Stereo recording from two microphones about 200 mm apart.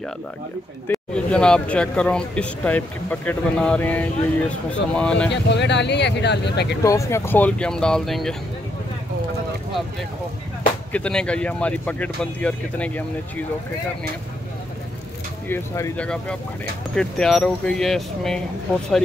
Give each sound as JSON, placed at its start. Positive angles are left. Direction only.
{"t": 0.8, "sound": "speech", "side_deg": 5}
{"t": 5.3, "sound": "speech", "side_deg": 60}
{"t": 6.8, "sound": "speech", "side_deg": 15}
{"t": 10.9, "sound": "speech", "side_deg": 5}
{"t": 15.4, "sound": "speech", "side_deg": 15}